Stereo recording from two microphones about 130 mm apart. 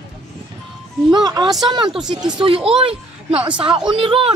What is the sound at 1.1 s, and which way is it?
Speech, 35° right (ahead or behind).